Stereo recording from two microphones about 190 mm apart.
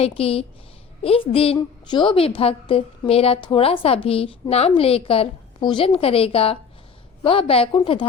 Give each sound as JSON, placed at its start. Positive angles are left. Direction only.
{"t": 0.0, "sound": "a woman's voice", "side_deg": 30}